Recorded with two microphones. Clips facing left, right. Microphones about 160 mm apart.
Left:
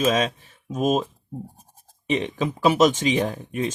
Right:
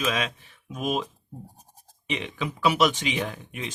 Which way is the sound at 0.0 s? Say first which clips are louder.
Left 7 dB; 40° left (ahead or behind).